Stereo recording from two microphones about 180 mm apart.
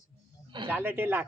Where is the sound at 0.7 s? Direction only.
10° right (ahead or behind).